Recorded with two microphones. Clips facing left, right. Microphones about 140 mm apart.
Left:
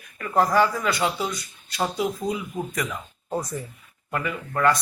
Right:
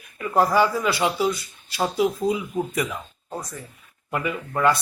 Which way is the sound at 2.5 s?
10° right (ahead or behind).